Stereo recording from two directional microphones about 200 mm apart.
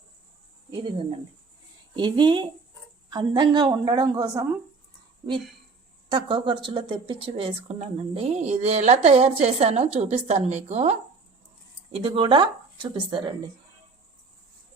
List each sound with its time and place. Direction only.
2.0 s a woman's voice: 20° right (ahead or behind)
5.2 s speech: 30° right (ahead or behind)
12.0 s a woman's voice: 25° right (ahead or behind)